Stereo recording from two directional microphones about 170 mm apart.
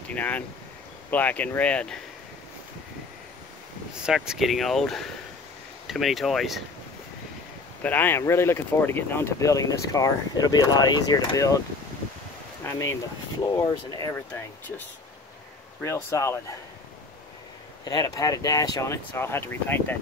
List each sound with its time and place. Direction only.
0.1 s speech: 10° left (ahead or behind)
3.9 s speech: 5° right (ahead or behind)
7.8 s speech: 10° left (ahead or behind)
12.6 s speech: 15° left (ahead or behind)
15.8 s speech: 15° left (ahead or behind)
17.8 s speech: 20° left (ahead or behind)